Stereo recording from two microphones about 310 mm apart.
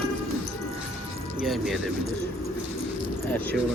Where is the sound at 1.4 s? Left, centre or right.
Centre.